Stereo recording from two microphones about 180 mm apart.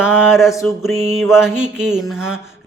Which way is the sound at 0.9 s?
35° right (ahead or behind).